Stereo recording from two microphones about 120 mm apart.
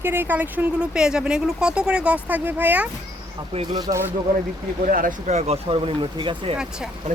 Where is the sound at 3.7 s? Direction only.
35° right (ahead or behind).